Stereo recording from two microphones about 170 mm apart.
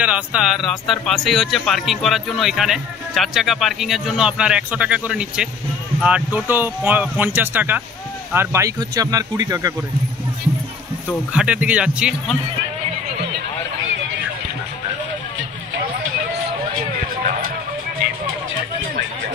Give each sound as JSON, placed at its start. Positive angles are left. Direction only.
{"t": 0.0, "sound": "speech", "side_deg": -5}
{"t": 11.3, "sound": "speech", "side_deg": -5}